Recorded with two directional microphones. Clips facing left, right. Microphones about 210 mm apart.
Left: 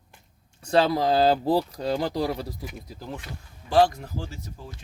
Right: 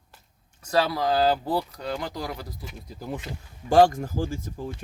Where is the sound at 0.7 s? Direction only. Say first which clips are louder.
Left 3 dB; 25° left (ahead or behind).